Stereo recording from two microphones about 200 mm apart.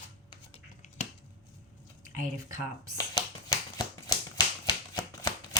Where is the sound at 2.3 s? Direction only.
15° right (ahead or behind).